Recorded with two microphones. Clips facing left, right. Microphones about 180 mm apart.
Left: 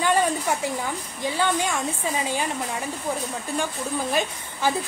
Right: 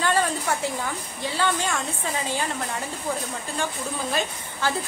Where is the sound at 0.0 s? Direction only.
15° left (ahead or behind).